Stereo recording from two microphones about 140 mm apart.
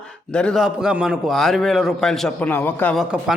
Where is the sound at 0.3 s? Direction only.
5° left (ahead or behind).